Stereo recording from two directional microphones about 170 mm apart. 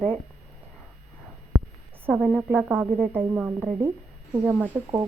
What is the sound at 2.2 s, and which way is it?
Speech, 10° right (ahead or behind).